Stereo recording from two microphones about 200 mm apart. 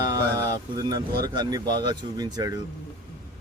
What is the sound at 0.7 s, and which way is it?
Speech, 20° right (ahead or behind).